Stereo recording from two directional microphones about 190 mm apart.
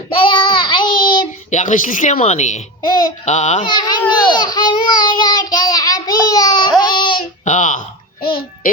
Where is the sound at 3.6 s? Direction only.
25° left (ahead or behind).